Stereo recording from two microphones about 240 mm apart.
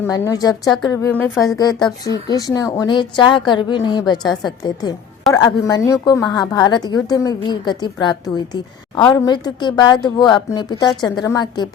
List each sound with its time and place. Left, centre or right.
0.0 s a woman's voice: centre
9.1 s a woman's voice: centre